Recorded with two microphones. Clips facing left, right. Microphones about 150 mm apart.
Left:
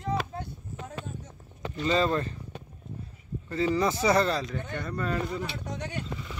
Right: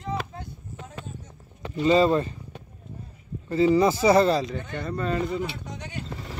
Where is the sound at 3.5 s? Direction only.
10° right (ahead or behind).